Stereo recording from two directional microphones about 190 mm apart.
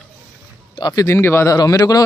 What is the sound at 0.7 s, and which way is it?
Speech, 20° left (ahead or behind).